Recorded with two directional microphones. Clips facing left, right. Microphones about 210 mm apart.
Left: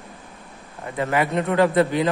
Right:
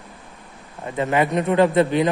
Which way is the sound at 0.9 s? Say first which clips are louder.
Right 2 dB; 25° right (ahead or behind).